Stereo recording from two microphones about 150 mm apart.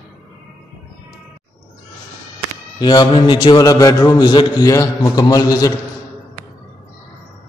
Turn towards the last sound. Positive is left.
turn(degrees=25)  # may be behind; listen again after turning